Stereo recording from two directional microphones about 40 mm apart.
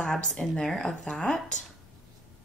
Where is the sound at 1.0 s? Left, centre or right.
Left.